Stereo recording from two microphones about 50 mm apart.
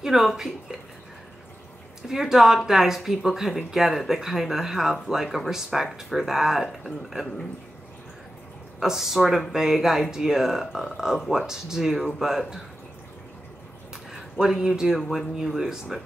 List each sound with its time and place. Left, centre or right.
0.0 s speech: centre
2.0 s speech: centre
8.7 s speech: centre
14.5 s speech: centre